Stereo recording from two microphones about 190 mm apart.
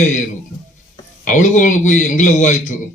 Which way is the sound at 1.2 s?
40° left (ahead or behind).